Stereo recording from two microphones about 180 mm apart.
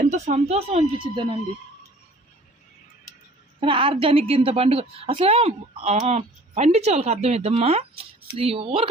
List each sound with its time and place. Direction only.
0.1 s a woman's voice: 40° right (ahead or behind)
3.6 s a woman's voice: 30° right (ahead or behind)